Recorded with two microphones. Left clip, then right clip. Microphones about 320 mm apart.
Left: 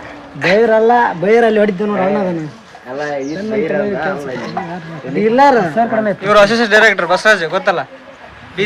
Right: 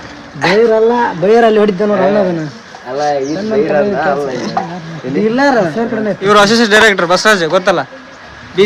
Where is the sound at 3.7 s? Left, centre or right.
Centre.